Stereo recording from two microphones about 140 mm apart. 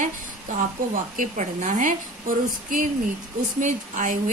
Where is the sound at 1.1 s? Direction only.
60° right (ahead or behind).